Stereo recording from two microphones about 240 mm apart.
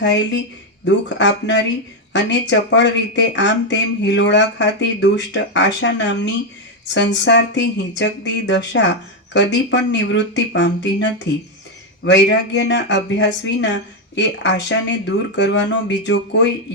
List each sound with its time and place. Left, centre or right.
0.0 s speech: left